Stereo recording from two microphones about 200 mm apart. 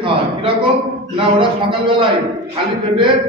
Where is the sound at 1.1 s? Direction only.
25° right (ahead or behind).